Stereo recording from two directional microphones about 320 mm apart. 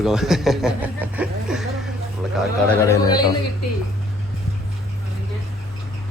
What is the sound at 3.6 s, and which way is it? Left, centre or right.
Speech, left.